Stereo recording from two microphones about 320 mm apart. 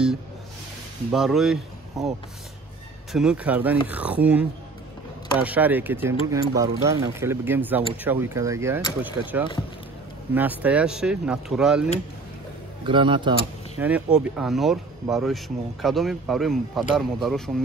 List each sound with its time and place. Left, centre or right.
1.1 s speech: centre
12.8 s speech: centre
13.7 s speech: centre